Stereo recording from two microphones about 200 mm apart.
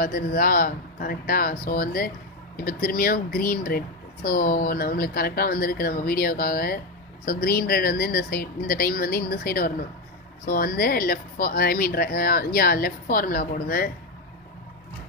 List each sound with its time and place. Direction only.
0.0 s speech: 45° left (ahead or behind)